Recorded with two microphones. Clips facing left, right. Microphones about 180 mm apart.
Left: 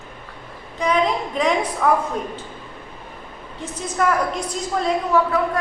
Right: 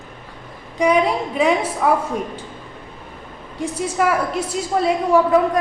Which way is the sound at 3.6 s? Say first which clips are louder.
Right 3 dB; 10° right (ahead or behind).